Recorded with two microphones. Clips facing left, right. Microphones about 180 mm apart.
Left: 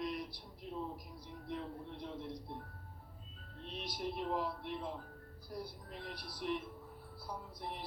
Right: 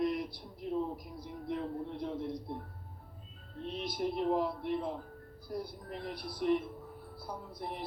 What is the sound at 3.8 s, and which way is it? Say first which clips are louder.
Speech: right 6 dB; 50° right (ahead or behind).